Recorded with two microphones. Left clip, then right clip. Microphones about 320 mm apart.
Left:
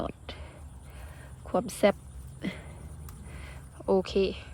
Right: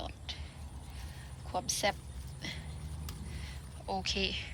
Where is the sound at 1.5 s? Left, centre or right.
Left.